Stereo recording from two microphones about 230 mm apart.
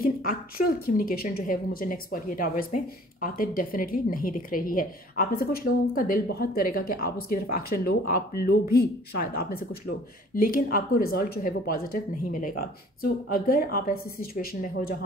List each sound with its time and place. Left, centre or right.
0.0 s a woman's voice: left